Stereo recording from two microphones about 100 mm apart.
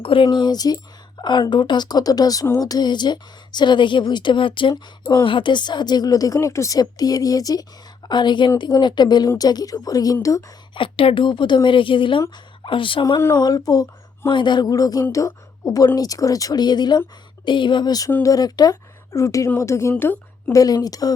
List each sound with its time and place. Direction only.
0.0 s speech: 60° left (ahead or behind)
4.7 s speech: 35° left (ahead or behind)
5.2 s speech: 55° left (ahead or behind); by 7.6 s 40° left (ahead or behind)
8.0 s speech: 50° left (ahead or behind)
10.8 s speech: 60° left (ahead or behind)
13.3 s speech: 40° left (ahead or behind)
14.3 s a woman's voice: 50° left (ahead or behind); by 20.1 s 20° left (ahead or behind)
20.5 s speech: 40° left (ahead or behind)